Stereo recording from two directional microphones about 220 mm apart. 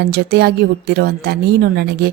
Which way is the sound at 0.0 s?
45° right (ahead or behind).